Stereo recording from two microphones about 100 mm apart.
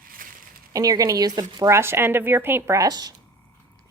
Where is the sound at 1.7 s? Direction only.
25° right (ahead or behind).